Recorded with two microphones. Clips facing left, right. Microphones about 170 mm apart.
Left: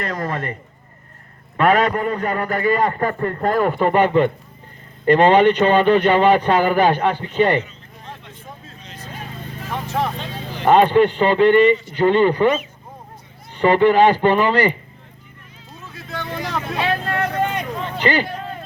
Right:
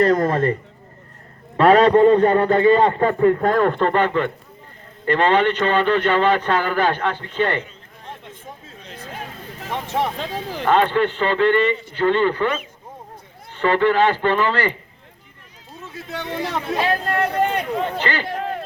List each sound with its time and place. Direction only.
0.0 s speech: 30° right (ahead or behind)
1.5 s a man's voice: 30° right (ahead or behind)
3.2 s speech: 10° right (ahead or behind)
3.4 s a man's voice: 5° left (ahead or behind)
8.8 s vehicle: 55° right (ahead or behind)
9.7 s a man's voice: 25° right (ahead or behind)
10.7 s a man's voice: 15° left (ahead or behind)
15.9 s a man's voice: 25° right (ahead or behind)
16.7 s speech: 40° right (ahead or behind)
17.7 s speech: 55° right (ahead or behind)
18.0 s a man's voice: 15° left (ahead or behind)
18.3 s a sound: 75° right (ahead or behind)